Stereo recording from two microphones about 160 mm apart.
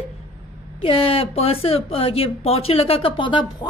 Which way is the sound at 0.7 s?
35° left (ahead or behind).